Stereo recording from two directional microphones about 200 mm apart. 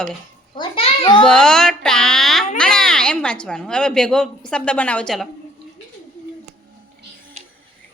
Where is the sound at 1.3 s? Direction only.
5° left (ahead or behind).